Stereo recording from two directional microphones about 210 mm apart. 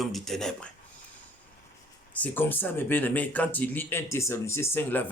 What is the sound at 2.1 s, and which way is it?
Speech, 10° left (ahead or behind).